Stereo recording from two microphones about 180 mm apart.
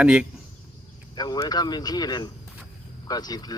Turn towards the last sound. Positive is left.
turn(degrees=20)  # may be behind; listen again after turning